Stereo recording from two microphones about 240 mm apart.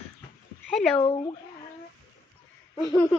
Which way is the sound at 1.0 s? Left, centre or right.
Left.